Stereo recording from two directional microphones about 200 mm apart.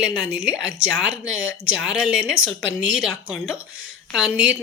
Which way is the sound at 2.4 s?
70° right (ahead or behind).